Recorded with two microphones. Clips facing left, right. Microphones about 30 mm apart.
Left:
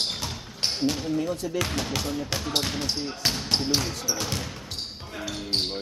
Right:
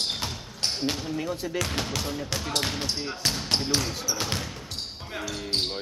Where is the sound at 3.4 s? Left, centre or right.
Centre.